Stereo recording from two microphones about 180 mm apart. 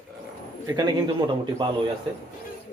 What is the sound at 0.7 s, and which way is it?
Speech, 20° right (ahead or behind).